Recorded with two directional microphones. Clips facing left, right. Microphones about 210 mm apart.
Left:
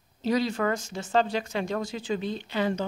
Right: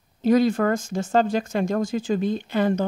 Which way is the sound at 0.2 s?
50° right (ahead or behind).